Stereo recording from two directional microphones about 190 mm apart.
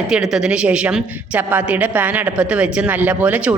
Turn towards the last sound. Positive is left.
turn(degrees=-10)  # may be behind; listen again after turning